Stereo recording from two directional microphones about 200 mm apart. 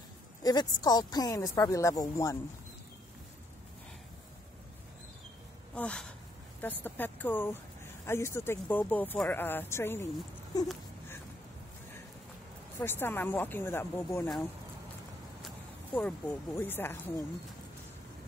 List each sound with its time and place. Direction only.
0.4 s speech: 20° left (ahead or behind)
5.8 s speech: 5° left (ahead or behind)
10.5 s a sound: 20° left (ahead or behind)
12.7 s speech: 10° left (ahead or behind)
15.4 s speech: 5° left (ahead or behind)